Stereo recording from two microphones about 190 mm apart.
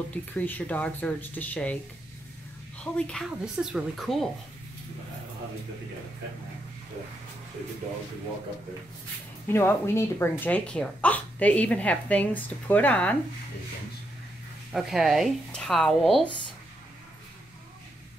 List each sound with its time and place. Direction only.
0.1 s speech: 10° left (ahead or behind)
2.8 s speech: 5° left (ahead or behind)
9.5 s speech: 10° left (ahead or behind)
14.7 s speech: centre (ahead or behind)